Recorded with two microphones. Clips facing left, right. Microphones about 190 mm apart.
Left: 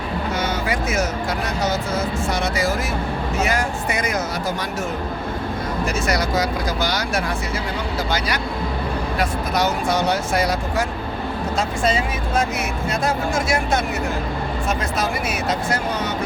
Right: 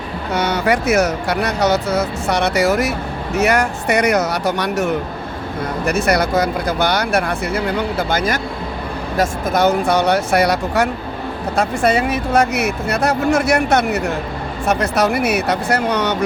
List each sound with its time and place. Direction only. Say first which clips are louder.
0.3 s speech: right 9 dB; 70° right (ahead or behind)